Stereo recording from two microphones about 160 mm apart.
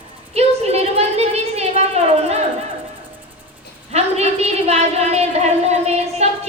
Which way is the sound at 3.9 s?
40° right (ahead or behind).